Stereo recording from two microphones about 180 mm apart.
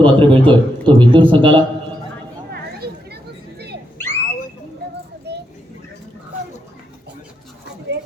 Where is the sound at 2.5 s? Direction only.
60° right (ahead or behind).